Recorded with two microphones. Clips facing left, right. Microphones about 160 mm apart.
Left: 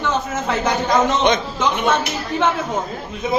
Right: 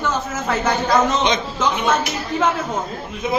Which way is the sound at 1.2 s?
55° left (ahead or behind).